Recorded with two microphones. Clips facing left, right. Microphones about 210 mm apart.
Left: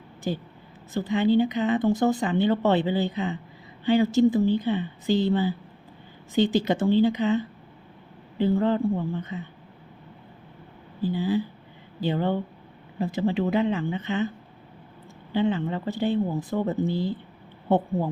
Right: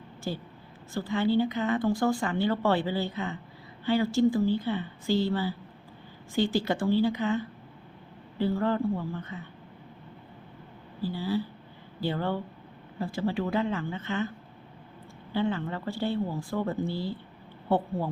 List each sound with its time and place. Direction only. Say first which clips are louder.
0.3 s speech: left 5 dB; 15° left (ahead or behind)
11.0 s speech: left 5 dB; 20° left (ahead or behind)
15.3 s speech: left 4 dB; 20° left (ahead or behind)